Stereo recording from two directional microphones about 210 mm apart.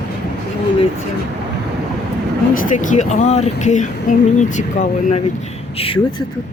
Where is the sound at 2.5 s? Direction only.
40° left (ahead or behind).